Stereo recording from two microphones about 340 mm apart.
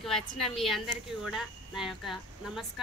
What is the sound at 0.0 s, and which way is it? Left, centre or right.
A woman's voice, centre.